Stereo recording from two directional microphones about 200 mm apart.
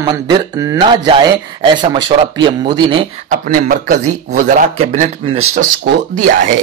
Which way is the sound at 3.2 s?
40° right (ahead or behind).